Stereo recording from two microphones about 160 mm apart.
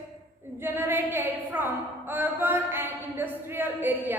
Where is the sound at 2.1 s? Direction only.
10° right (ahead or behind).